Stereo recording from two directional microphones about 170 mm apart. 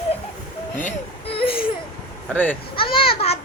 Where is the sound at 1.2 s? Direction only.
35° left (ahead or behind).